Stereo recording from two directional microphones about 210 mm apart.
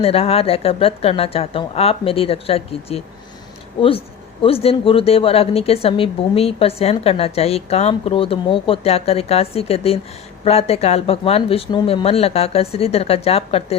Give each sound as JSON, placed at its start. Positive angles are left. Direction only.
{"t": 0.0, "sound": "a woman's voice", "side_deg": 30}